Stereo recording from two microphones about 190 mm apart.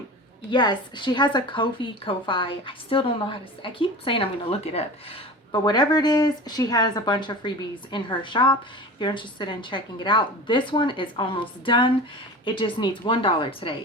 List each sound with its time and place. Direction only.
0.5 s a woman's voice: 25° left (ahead or behind)
5.5 s a woman's voice: 20° left (ahead or behind)